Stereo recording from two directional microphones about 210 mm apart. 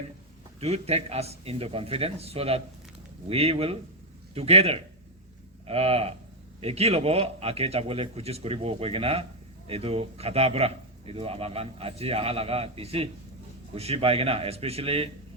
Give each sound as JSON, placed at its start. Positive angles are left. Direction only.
{"t": 0.6, "sound": "speech", "side_deg": -30}